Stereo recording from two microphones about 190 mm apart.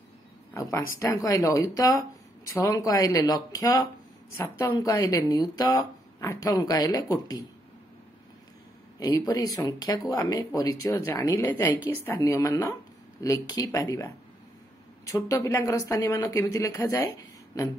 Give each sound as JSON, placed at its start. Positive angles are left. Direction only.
{"t": 0.6, "sound": "speech", "side_deg": 15}
{"t": 9.0, "sound": "speech", "side_deg": 20}